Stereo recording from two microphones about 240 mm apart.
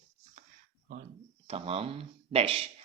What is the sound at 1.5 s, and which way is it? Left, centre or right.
Speech, right.